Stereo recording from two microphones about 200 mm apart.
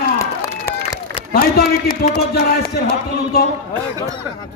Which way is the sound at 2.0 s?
50° left (ahead or behind).